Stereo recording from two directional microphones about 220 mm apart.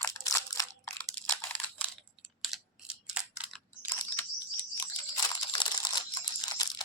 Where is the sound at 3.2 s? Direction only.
5° right (ahead or behind).